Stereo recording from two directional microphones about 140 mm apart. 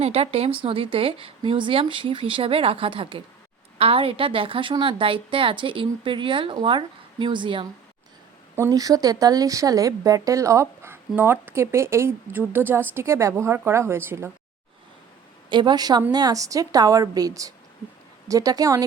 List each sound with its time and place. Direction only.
0.0 s a woman's voice: 45° right (ahead or behind)
8.5 s speech: 20° right (ahead or behind)
15.4 s speech: 35° right (ahead or behind)